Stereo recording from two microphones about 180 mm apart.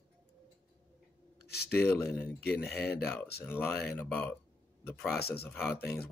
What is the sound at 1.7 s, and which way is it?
Speech, 10° left (ahead or behind).